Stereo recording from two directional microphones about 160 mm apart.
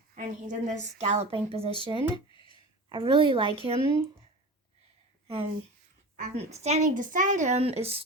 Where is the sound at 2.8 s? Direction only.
30° right (ahead or behind).